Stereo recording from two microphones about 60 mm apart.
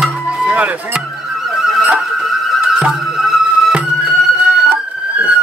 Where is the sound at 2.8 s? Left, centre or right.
Centre.